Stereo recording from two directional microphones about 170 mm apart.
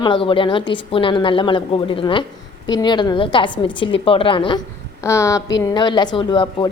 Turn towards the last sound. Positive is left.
turn(degrees=25)  # may be behind; listen again after turning